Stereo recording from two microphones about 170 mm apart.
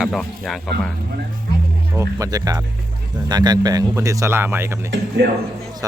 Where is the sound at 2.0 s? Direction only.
20° right (ahead or behind).